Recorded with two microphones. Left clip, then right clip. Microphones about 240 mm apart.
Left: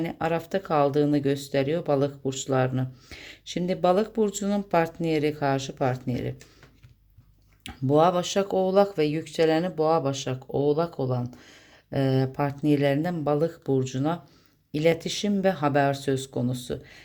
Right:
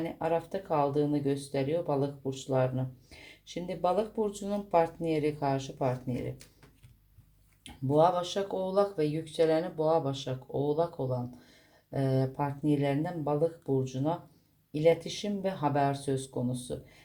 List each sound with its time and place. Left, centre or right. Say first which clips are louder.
0.0 s speech: left 3 dB; left
7.6 s speech: left 4 dB; left